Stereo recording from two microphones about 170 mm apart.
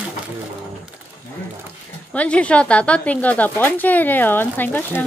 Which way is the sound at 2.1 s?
5° left (ahead or behind).